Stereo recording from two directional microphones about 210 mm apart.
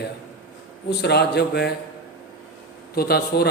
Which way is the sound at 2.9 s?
50° left (ahead or behind).